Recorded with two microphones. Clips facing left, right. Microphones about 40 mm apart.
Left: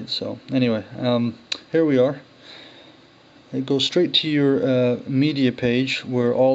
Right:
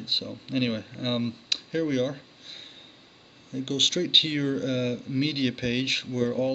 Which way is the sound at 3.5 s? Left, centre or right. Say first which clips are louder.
Left 6 dB; left.